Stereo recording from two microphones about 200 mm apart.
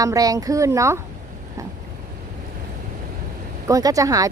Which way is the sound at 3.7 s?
15° right (ahead or behind).